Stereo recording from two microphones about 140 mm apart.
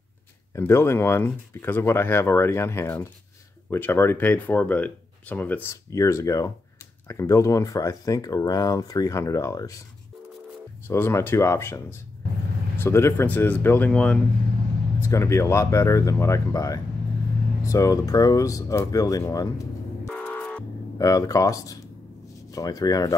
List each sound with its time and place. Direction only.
0.6 s speech: 20° left (ahead or behind)
10.9 s speech: 20° left (ahead or behind)
15.0 s speech: 20° left (ahead or behind)
20.1 s music: 5° left (ahead or behind)
21.0 s speech: 25° left (ahead or behind)